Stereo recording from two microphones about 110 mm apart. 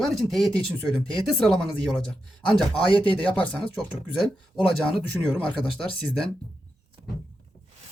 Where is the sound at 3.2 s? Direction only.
10° left (ahead or behind).